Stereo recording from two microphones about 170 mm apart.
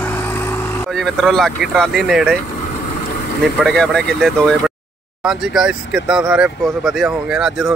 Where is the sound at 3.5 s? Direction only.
Centre (ahead or behind).